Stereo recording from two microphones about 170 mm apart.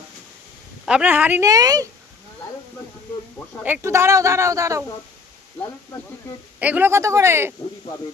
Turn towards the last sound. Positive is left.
turn(degrees=-15)  # may be behind; listen again after turning